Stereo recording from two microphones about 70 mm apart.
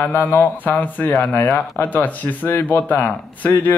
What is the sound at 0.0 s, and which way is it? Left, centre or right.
Speech, left.